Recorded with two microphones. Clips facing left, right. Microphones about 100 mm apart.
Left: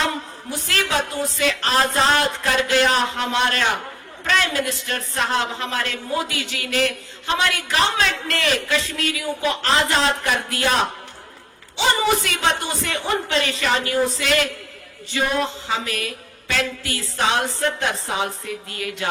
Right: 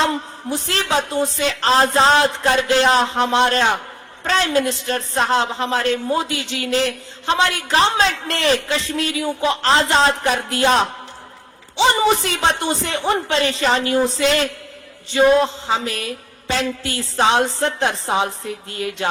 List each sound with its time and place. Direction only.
0.5 s a woman's voice: 25° right (ahead or behind)
11.9 s a woman's voice: 30° right (ahead or behind)